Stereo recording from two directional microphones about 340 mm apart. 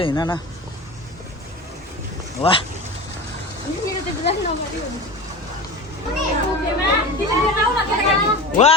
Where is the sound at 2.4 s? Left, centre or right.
Centre.